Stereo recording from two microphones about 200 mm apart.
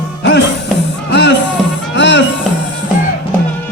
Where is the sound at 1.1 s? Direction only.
60° left (ahead or behind).